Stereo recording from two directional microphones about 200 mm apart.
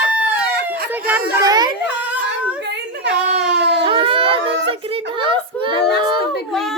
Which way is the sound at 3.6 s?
60° right (ahead or behind).